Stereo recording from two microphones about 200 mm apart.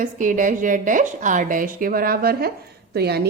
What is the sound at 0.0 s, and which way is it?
A woman's voice, 40° right (ahead or behind).